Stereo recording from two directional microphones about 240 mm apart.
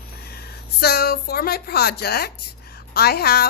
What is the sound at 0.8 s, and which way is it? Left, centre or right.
Speech, left.